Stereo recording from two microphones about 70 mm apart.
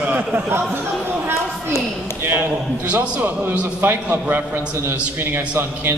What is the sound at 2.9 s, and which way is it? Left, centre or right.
A man's voice, right.